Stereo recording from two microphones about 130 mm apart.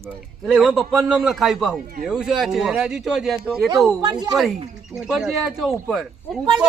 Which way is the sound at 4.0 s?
30° right (ahead or behind).